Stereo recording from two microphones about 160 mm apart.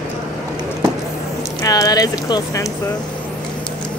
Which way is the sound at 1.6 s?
25° left (ahead or behind).